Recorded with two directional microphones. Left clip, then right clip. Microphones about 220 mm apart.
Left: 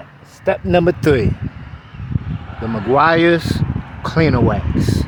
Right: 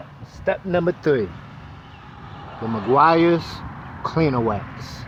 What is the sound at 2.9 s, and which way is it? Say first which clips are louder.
Speech: left 3 dB; 15° left (ahead or behind).